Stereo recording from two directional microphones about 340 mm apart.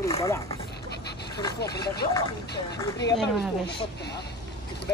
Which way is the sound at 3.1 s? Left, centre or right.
Centre.